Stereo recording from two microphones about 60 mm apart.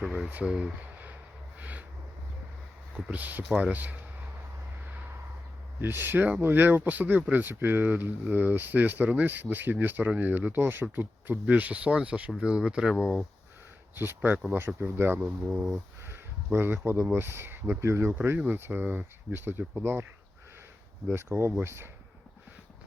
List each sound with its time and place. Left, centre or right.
0.0 s a sound: centre
0.4 s speech: centre
1.5 s a sound: right
3.1 s speech: right
5.8 s speech: right; by 13.1 s centre
13.9 s speech: right
15.4 s speech: centre
16.0 s speech: right
17.7 s speech: right
18.5 s speech: right
21.1 s speech: right